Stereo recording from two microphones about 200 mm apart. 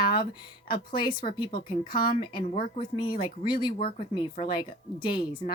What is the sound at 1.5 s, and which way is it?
Speech, 45° left (ahead or behind).